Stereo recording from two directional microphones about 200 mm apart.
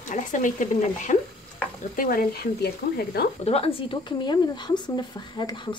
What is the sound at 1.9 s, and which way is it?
Stir, 45° left (ahead or behind).